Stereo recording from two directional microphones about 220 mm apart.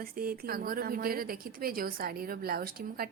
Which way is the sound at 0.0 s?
40° right (ahead or behind).